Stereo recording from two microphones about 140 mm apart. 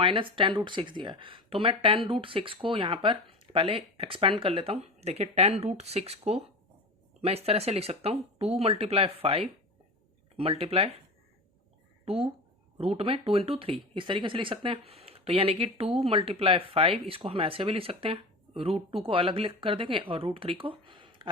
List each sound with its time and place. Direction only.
0.0 s speech: 40° right (ahead or behind)
12.0 s speech: 40° right (ahead or behind)